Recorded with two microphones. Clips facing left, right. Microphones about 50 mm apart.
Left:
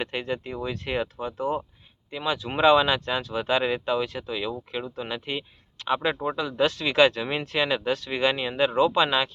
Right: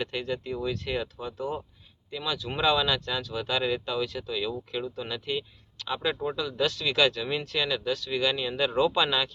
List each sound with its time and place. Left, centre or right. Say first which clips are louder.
0.0 s speech: left 2 dB; left